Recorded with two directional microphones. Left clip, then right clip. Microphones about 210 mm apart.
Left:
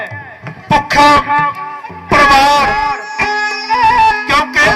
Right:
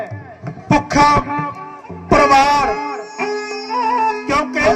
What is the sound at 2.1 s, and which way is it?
Music, 55° right (ahead or behind).